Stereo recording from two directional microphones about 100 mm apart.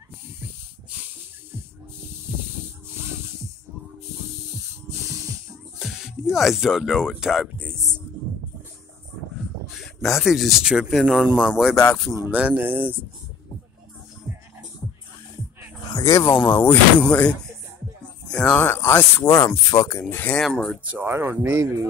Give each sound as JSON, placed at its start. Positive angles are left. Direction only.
{"t": 5.8, "sound": "speech", "side_deg": -5}
{"t": 7.5, "sound": "speech", "side_deg": -20}
{"t": 10.0, "sound": "speech", "side_deg": 0}
{"t": 11.7, "sound": "speech", "side_deg": 5}
{"t": 12.3, "sound": "speech", "side_deg": -15}
{"t": 16.0, "sound": "speech", "side_deg": 35}
{"t": 16.3, "sound": "speech", "side_deg": 15}
{"t": 18.3, "sound": "a sound", "side_deg": 10}
{"t": 18.6, "sound": "speech", "side_deg": 25}
{"t": 19.4, "sound": "speech", "side_deg": 40}
{"t": 20.0, "sound": "speech", "side_deg": 20}
{"t": 20.3, "sound": "speech", "side_deg": 5}
{"t": 20.9, "sound": "speech", "side_deg": -25}